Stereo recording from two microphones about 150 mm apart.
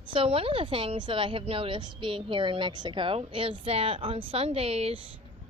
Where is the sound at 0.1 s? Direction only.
40° right (ahead or behind).